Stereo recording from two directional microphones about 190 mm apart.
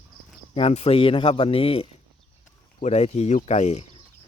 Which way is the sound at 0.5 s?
30° left (ahead or behind).